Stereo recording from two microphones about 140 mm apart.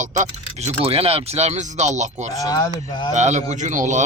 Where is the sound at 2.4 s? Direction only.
25° left (ahead or behind).